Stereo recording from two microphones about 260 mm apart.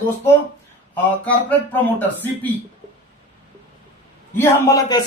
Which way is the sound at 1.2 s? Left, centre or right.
Centre.